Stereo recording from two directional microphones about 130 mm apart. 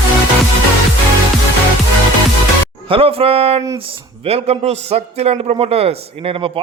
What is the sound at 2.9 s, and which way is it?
A man's voice, 45° right (ahead or behind).